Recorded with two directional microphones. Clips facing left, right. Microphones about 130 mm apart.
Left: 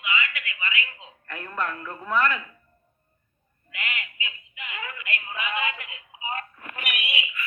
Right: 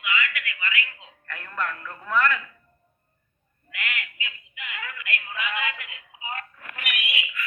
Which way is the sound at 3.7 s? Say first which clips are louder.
Right 1 dB; 25° left (ahead or behind).